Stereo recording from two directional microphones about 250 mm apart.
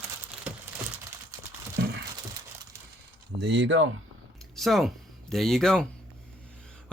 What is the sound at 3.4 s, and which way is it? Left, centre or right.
Speech, right.